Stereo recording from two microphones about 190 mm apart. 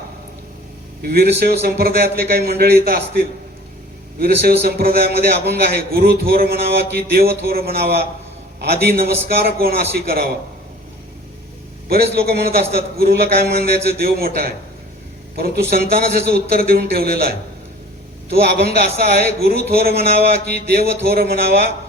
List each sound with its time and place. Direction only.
1.0 s a man's voice: 55° right (ahead or behind)
11.9 s a man's voice: 55° right (ahead or behind)